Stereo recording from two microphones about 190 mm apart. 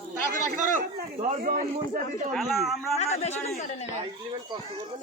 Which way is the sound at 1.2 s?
45° right (ahead or behind).